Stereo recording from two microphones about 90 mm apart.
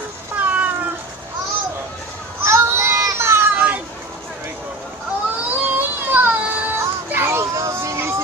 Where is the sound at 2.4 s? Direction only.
30° right (ahead or behind).